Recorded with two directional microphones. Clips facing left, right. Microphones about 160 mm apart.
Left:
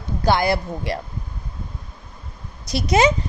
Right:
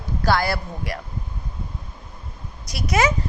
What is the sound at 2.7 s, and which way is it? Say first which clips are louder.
Speech: left 4 dB; 25° left (ahead or behind).